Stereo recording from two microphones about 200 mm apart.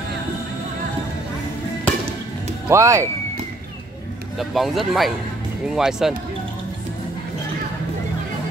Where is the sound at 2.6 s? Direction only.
15° right (ahead or behind).